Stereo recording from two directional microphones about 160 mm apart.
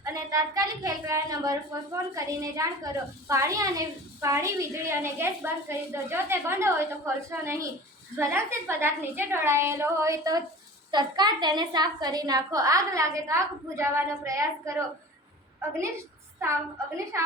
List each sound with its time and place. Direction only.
0.0 s a woman's voice: 20° right (ahead or behind)
16.4 s a woman's voice: 15° right (ahead or behind)